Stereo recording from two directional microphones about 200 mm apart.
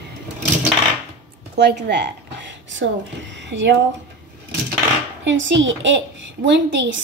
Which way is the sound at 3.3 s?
65° right (ahead or behind).